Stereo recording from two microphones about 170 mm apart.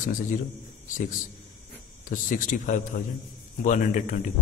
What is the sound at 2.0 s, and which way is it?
A man's voice, 50° left (ahead or behind).